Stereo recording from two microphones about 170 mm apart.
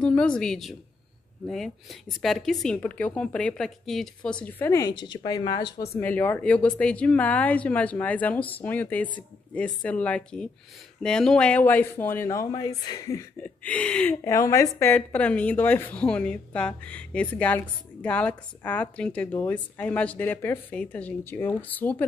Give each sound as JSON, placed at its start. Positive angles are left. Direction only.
{"t": 0.0, "sound": "a woman's voice", "side_deg": 5}
{"t": 5.9, "sound": "a woman's voice", "side_deg": 10}
{"t": 13.7, "sound": "a woman's voice", "side_deg": 5}
{"t": 14.2, "sound": "a woman's voice", "side_deg": 15}